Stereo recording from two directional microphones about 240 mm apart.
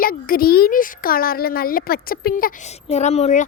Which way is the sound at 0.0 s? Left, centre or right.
Left.